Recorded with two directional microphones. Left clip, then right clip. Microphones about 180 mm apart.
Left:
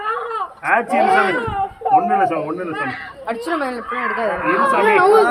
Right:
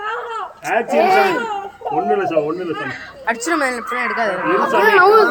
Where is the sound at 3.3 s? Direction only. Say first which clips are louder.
Right 4 dB; 5° right (ahead or behind).